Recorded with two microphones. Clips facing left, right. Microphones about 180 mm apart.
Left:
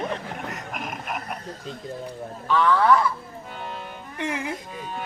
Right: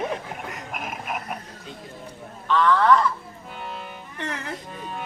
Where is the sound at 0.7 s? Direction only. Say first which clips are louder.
Right 3 dB; centre (ahead or behind).